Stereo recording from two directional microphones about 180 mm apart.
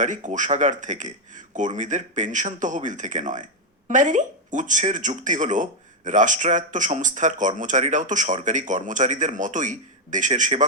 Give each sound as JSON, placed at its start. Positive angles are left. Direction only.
{"t": 0.0, "sound": "speech", "side_deg": -45}